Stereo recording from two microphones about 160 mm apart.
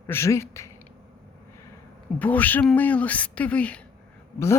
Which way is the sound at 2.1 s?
10° left (ahead or behind).